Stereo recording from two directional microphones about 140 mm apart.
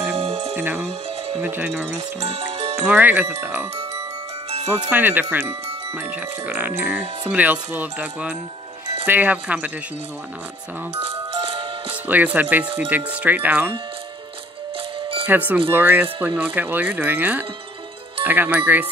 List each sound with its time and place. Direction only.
0.1 s music: 50° right (ahead or behind)
0.6 s speech: 15° right (ahead or behind)
2.0 s speech: 50° right (ahead or behind)
2.9 s speech: 15° right (ahead or behind)
11.0 s music: 45° right (ahead or behind)
12.1 s speech: 10° right (ahead or behind)
15.2 s speech: 15° right (ahead or behind)